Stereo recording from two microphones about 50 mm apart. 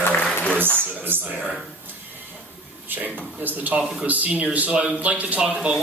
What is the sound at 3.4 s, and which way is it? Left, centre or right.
A man's voice, right.